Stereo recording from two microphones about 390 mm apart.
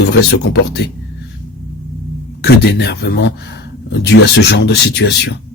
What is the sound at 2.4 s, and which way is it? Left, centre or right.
A man's voice, left.